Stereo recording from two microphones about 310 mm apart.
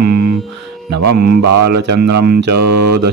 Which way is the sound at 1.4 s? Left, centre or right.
Right.